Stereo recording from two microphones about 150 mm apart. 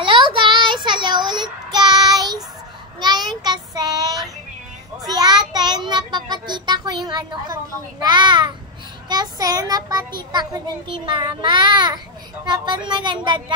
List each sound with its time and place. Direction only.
0.0 s child singing: 35° right (ahead or behind)
8.0 s a child's voice: 30° right (ahead or behind)